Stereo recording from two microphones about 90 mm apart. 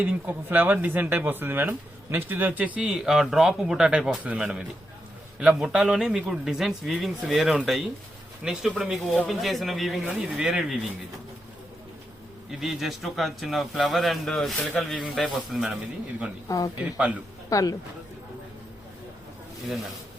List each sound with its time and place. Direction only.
0.0 s speech: 20° right (ahead or behind)
2.9 s a man's voice: 5° right (ahead or behind)
4.2 s speech: 15° right (ahead or behind)
5.4 s a man's voice: 5° right (ahead or behind)
12.5 s a man's voice: centre (ahead or behind)
16.5 s a man's voice: 40° left (ahead or behind)